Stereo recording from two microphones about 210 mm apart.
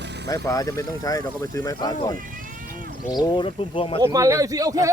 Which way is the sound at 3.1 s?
20° left (ahead or behind).